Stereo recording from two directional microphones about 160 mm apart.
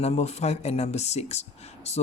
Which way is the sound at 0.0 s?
40° left (ahead or behind).